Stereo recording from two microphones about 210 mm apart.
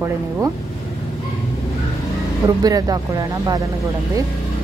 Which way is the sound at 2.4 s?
15° right (ahead or behind).